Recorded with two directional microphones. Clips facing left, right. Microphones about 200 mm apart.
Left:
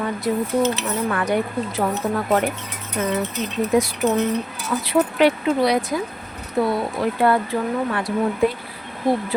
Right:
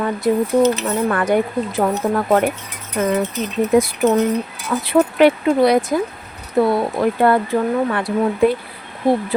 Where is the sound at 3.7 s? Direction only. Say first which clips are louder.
Right 4 dB; 55° right (ahead or behind).